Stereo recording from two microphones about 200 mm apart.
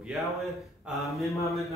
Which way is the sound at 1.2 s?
15° left (ahead or behind).